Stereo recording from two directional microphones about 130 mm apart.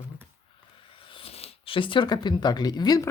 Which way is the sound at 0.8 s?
45° left (ahead or behind).